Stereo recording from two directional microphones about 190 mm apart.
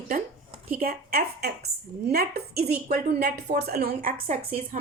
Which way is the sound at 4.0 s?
35° right (ahead or behind).